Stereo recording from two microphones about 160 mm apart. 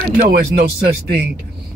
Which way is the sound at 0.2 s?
70° right (ahead or behind).